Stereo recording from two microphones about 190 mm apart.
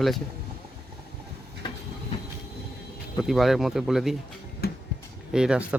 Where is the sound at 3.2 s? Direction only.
Centre (ahead or behind).